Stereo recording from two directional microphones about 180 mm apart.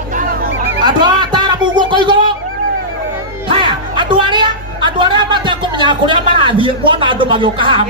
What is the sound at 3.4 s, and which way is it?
Music, 25° right (ahead or behind).